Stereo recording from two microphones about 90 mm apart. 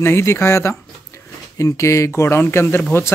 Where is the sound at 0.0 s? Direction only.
30° left (ahead or behind).